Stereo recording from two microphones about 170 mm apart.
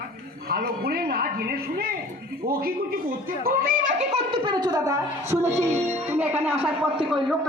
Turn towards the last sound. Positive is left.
turn(degrees=0)  # may be behind; listen again after turning